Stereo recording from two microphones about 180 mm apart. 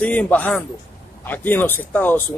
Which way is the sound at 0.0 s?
10° left (ahead or behind).